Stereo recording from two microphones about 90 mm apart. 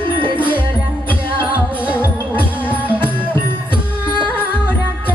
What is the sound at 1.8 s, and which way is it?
Music, 15° right (ahead or behind).